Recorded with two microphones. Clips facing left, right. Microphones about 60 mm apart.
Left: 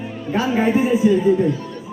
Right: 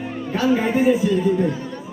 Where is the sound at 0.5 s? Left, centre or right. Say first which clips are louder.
Left 1 dB; left.